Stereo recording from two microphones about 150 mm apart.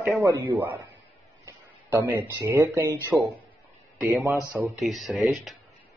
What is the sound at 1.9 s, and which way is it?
Speech, 15° right (ahead or behind).